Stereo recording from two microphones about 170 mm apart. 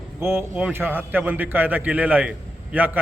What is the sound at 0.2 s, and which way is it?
A man's voice, 15° right (ahead or behind).